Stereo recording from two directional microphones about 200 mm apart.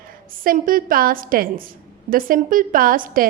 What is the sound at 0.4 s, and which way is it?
A woman's voice, 45° right (ahead or behind).